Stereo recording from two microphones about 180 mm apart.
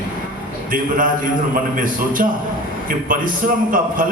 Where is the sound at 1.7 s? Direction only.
50° right (ahead or behind).